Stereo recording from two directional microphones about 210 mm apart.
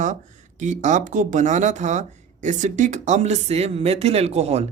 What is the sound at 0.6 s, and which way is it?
Speech, 35° right (ahead or behind).